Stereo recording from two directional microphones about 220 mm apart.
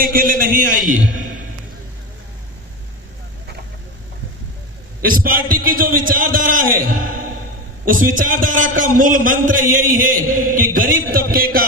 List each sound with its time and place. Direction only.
0.0 s a man's voice: 40° right (ahead or behind)
4.9 s a man's voice: 40° right (ahead or behind)